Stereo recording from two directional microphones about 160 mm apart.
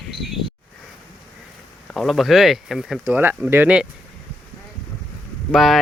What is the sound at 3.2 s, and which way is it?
Speech, 10° right (ahead or behind).